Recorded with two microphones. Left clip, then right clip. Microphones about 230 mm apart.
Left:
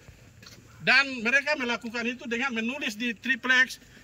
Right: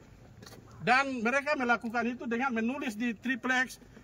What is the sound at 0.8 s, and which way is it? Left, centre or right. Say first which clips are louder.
A man's voice: left 4 dB; centre.